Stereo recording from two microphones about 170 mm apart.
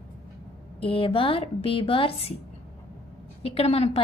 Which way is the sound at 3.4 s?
35° left (ahead or behind).